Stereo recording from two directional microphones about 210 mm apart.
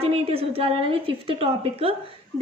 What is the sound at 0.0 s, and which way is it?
A woman's voice, 30° right (ahead or behind).